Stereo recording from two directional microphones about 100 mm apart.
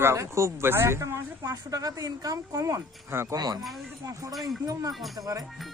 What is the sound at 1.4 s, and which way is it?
Speech, 35° right (ahead or behind).